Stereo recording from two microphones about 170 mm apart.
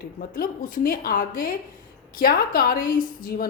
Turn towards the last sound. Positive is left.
turn(degrees=60)  # may be behind; listen again after turning